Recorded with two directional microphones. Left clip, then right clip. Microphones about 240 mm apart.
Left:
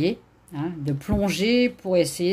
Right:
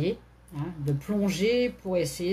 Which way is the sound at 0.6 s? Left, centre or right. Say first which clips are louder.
Left 5 dB; left.